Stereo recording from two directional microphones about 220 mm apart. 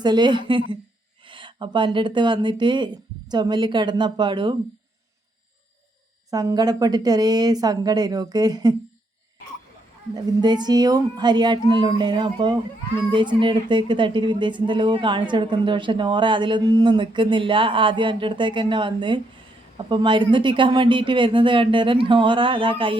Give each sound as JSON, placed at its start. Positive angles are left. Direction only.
{"t": 0.0, "sound": "a woman's voice", "side_deg": -20}
{"t": 6.3, "sound": "a woman's voice", "side_deg": -15}
{"t": 10.4, "sound": "a woman's voice", "side_deg": -20}